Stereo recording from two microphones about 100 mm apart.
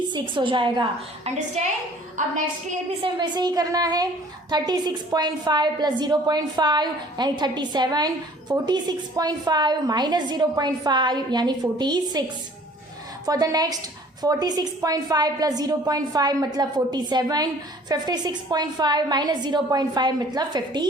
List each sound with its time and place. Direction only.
0.1 s a woman's voice: 55° right (ahead or behind)
3.0 s a woman's voice: 45° right (ahead or behind)
13.2 s a woman's voice: 40° right (ahead or behind)